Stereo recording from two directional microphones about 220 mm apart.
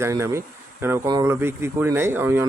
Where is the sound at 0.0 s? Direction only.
10° right (ahead or behind).